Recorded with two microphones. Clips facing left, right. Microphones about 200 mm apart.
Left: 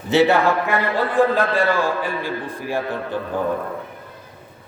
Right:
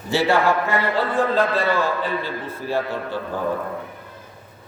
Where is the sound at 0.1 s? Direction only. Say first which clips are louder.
Left 4 dB; 20° left (ahead or behind).